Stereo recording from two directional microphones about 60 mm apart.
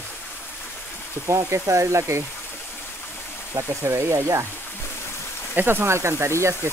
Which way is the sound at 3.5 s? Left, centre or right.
Right.